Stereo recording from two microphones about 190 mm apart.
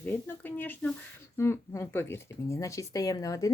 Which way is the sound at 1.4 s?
15° left (ahead or behind).